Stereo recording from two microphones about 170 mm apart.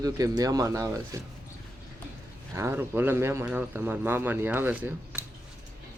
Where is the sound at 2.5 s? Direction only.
15° right (ahead or behind).